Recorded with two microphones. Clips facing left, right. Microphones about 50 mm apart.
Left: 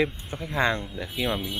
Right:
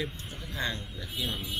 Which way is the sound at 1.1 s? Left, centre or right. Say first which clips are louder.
Left 7 dB; left.